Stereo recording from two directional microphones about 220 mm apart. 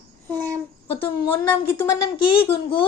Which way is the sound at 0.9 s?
25° left (ahead or behind).